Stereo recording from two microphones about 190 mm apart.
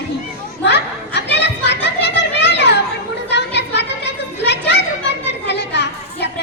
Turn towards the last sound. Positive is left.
turn(degrees=65)  # may be behind; listen again after turning